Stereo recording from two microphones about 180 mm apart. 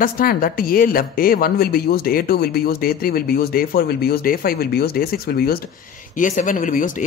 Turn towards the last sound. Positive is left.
turn(degrees=45)  # may be behind; listen again after turning